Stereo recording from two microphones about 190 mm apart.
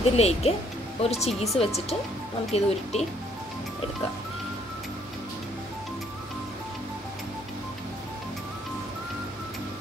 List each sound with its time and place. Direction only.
0.1 s speech: 35° left (ahead or behind)